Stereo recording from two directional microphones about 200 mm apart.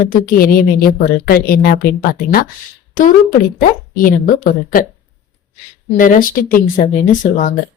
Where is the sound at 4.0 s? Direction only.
45° left (ahead or behind).